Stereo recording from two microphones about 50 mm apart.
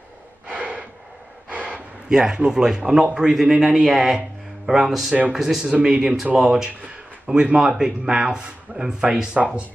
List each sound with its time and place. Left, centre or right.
0.5 s gasp: right
3.2 s speech: centre